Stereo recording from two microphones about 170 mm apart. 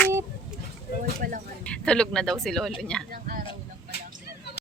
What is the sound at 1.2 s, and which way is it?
Speech, 55° right (ahead or behind).